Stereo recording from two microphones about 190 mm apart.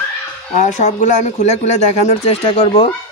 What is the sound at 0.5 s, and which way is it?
A man's voice, 40° left (ahead or behind).